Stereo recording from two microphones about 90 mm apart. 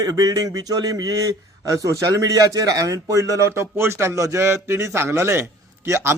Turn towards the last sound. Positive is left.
turn(degrees=-30)  # may be behind; listen again after turning